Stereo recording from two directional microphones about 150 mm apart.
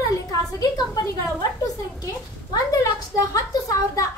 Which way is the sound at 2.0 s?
25° left (ahead or behind).